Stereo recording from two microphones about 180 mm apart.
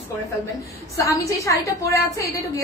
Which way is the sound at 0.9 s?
15° left (ahead or behind).